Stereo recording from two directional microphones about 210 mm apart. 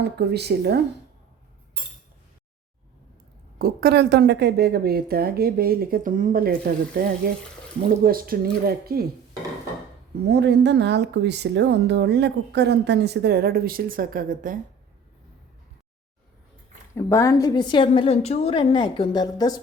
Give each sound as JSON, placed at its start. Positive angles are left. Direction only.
{"t": 0.0, "sound": "a woman's voice", "side_deg": -50}
{"t": 3.6, "sound": "a woman's voice", "side_deg": -45}
{"t": 7.8, "sound": "a woman's voice", "side_deg": -45}
{"t": 10.2, "sound": "a woman's voice", "side_deg": -55}
{"t": 16.9, "sound": "a woman's voice", "side_deg": 15}